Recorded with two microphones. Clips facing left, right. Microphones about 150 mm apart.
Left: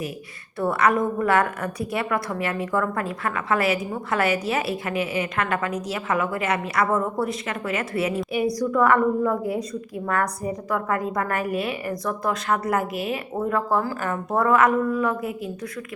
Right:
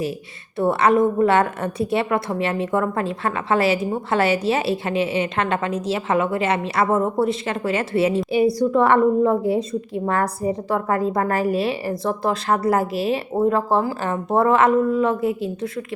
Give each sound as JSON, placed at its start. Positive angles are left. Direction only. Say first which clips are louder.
{"t": 0.6, "sound": "a woman's voice", "louder": "right 4 dB", "side_deg": -25}